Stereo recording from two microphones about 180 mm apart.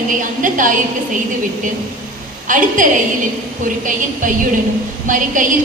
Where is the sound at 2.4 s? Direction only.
45° right (ahead or behind).